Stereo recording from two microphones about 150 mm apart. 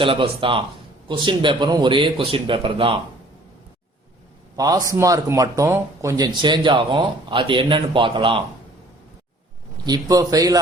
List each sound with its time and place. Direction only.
0.0 s speech: 35° right (ahead or behind)
4.5 s speech: 25° right (ahead or behind)
9.8 s speech: 25° right (ahead or behind)